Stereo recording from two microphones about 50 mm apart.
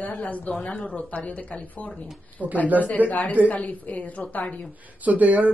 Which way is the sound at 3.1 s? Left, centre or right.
Left.